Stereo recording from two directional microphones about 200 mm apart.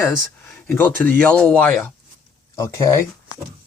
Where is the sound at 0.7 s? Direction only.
10° left (ahead or behind).